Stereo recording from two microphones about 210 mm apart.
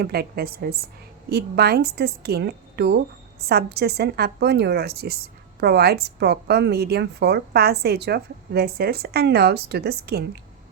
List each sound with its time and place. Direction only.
0.0 s a woman's voice: 50° right (ahead or behind)